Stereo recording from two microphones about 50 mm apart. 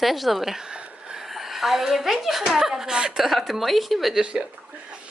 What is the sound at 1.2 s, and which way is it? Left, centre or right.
A woman's voice, centre.